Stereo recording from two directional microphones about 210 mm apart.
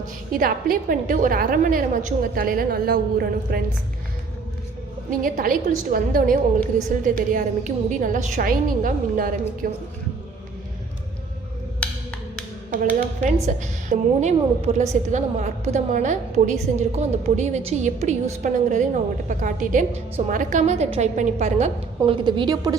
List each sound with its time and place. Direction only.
0.3 s a woman's voice: 40° right (ahead or behind)
5.2 s a woman's voice: 40° right (ahead or behind)
12.7 s a woman's voice: 40° right (ahead or behind); by 22.7 s 20° right (ahead or behind)